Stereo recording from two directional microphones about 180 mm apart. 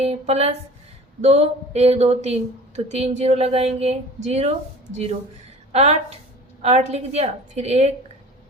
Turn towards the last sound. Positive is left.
turn(degrees=-35)  # may be behind; listen again after turning